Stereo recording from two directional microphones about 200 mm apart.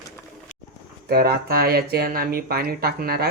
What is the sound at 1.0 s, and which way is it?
Speech, 50° right (ahead or behind).